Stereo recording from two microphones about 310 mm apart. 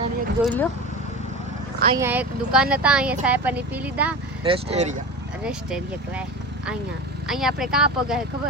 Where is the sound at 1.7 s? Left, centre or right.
Right.